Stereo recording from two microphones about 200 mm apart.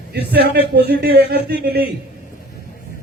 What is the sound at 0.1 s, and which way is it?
Speech, 50° right (ahead or behind).